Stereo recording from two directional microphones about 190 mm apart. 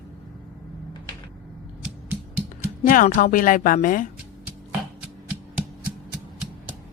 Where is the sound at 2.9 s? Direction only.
45° left (ahead or behind).